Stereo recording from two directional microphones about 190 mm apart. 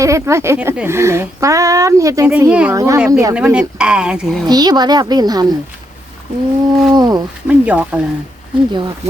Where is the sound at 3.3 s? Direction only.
5° right (ahead or behind).